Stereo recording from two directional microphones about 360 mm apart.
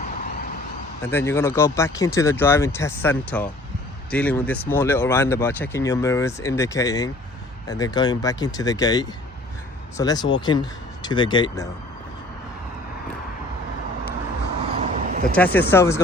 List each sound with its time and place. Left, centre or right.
0.0 s vehicle: left
1.1 s speech: centre
14.7 s a sound: centre
15.4 s speech: centre